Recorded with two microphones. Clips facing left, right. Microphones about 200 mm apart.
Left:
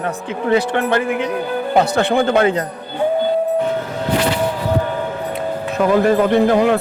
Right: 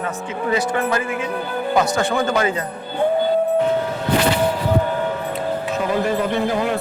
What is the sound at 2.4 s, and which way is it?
Speech, 60° left (ahead or behind).